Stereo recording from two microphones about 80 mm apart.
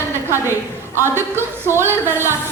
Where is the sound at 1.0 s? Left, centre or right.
Right.